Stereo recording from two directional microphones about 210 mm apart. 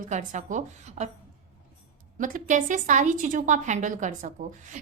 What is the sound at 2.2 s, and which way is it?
A woman's voice, 35° right (ahead or behind).